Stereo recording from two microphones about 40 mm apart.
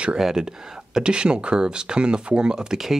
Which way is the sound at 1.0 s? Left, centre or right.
Right.